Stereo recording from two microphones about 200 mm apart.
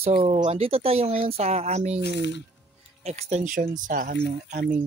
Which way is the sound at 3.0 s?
35° right (ahead or behind).